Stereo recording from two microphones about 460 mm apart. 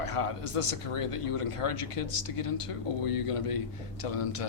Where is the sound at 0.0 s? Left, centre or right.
Left.